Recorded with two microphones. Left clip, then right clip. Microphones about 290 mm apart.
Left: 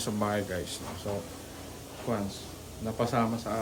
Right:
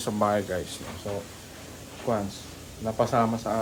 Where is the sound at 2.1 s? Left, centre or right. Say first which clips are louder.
Right 5 dB; centre.